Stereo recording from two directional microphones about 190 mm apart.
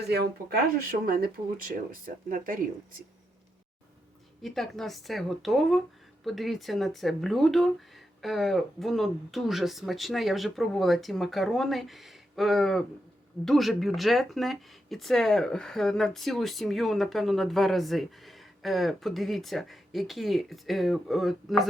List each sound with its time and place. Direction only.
0.1 s speech: 55° right (ahead or behind)
4.4 s speech: centre (ahead or behind)